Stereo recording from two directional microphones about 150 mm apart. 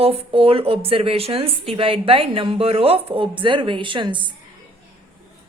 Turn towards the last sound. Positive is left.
turn(degrees=-30)  # may be behind; listen again after turning